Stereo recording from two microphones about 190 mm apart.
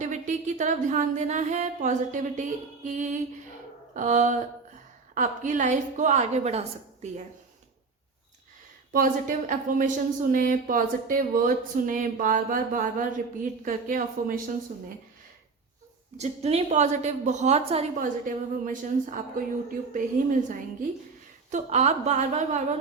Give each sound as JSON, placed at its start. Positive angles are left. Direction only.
{"t": 0.0, "sound": "a sound", "side_deg": -40}
{"t": 3.9, "sound": "a woman's voice", "side_deg": -40}
{"t": 8.9, "sound": "speech", "side_deg": -45}
{"t": 16.1, "sound": "a woman's voice", "side_deg": -35}
{"t": 18.3, "sound": "a woman's voice", "side_deg": -45}